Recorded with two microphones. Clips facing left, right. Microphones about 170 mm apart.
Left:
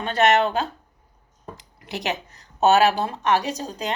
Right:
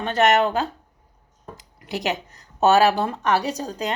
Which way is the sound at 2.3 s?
40° right (ahead or behind).